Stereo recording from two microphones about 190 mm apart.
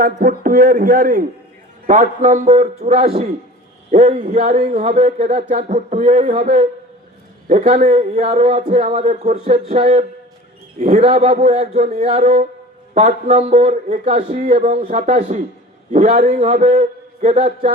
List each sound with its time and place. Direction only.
0.0 s speech: 45° right (ahead or behind)